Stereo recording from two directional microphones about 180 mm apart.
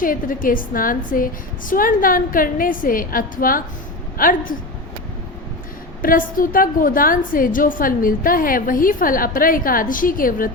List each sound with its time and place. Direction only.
0.0 s a woman's voice: 50° left (ahead or behind)
6.0 s a woman's voice: 50° left (ahead or behind)